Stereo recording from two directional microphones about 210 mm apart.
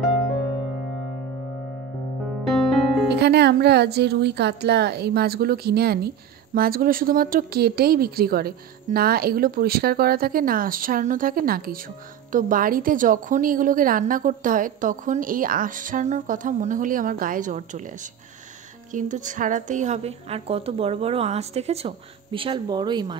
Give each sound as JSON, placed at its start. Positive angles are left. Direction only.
{"t": 3.1, "sound": "a woman's voice", "side_deg": -50}
{"t": 18.9, "sound": "a woman's voice", "side_deg": -35}